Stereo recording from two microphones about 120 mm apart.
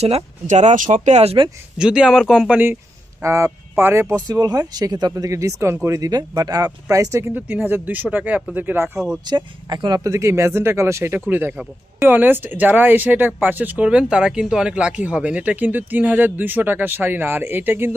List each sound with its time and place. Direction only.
0.4 s speech: 75° right (ahead or behind); by 1.5 s 55° right (ahead or behind)
1.8 s speech: 5° right (ahead or behind)
3.2 s speech: 25° right (ahead or behind)
4.3 s speech: 35° right (ahead or behind); by 8.9 s 15° right (ahead or behind)
9.2 s speech: 35° right (ahead or behind); by 17.9 s 20° right (ahead or behind)